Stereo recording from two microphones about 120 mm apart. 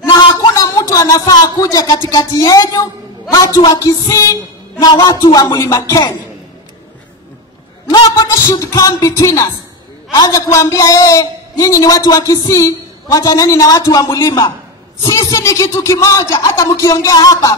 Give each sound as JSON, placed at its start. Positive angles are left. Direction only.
{"t": 0.6, "sound": "a woman's voice", "side_deg": 25}
{"t": 8.3, "sound": "a man's voice", "side_deg": 25}